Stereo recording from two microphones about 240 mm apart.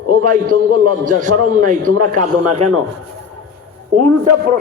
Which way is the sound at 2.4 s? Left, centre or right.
Right.